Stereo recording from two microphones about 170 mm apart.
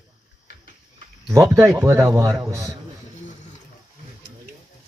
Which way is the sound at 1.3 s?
15° right (ahead or behind).